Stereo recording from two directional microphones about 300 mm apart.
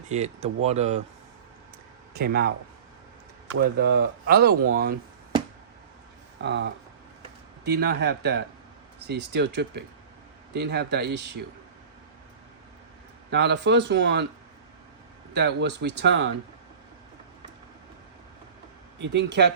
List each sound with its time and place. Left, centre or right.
0.1 s speech: right
2.1 s speech: right
3.5 s speech: right
6.4 s speech: right
13.3 s speech: right
15.4 s speech: right
18.9 s speech: right